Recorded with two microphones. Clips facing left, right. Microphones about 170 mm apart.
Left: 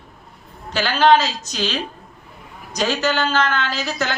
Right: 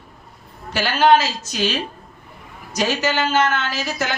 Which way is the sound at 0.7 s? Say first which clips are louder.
Even; 10° right (ahead or behind).